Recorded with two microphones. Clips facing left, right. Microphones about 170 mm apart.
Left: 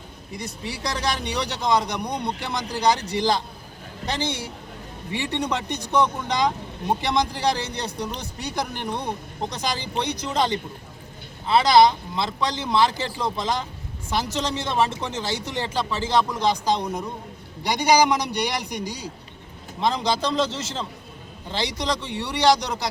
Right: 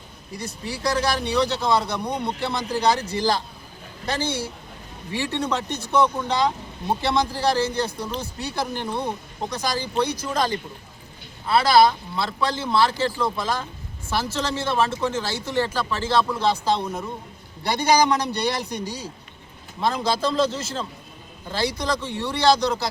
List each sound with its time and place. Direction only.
0.3 s speech: 15° left (ahead or behind)